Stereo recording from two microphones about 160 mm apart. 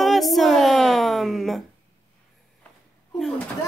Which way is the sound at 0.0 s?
Centre (ahead or behind).